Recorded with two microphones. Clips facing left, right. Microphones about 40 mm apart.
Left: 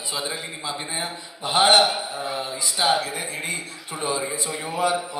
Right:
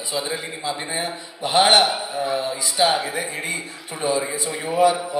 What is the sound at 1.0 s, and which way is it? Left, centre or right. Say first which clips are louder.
A man's voice: right 4 dB; right.